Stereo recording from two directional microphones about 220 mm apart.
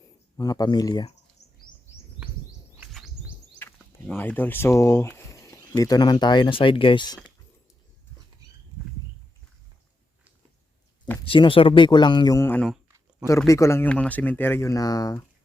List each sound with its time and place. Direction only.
0.3 s speech: 15° left (ahead or behind)
1.4 s bird: 30° left (ahead or behind)
2.8 s chirp: 5° right (ahead or behind)
3.6 s speech: 10° left (ahead or behind)
11.3 s speech: 25° left (ahead or behind)